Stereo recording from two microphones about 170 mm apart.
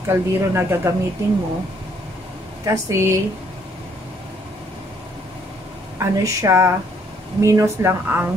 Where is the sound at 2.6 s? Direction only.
15° right (ahead or behind).